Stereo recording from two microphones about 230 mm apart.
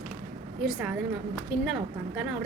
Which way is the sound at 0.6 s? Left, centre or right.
Centre.